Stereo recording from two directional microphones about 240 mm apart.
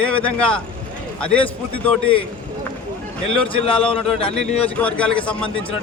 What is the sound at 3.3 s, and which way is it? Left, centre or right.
A man's voice, left.